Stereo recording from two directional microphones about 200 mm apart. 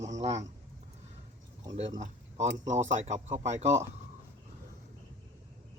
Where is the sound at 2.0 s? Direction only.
35° right (ahead or behind).